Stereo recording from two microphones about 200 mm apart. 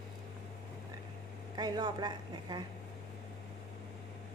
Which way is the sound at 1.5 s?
20° right (ahead or behind).